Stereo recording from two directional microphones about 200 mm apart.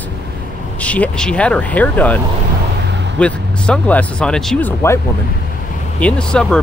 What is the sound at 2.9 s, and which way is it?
Vehicle, 60° right (ahead or behind).